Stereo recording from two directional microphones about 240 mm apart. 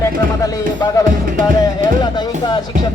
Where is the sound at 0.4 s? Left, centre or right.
Centre.